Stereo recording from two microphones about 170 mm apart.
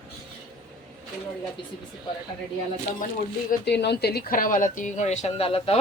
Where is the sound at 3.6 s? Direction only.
80° left.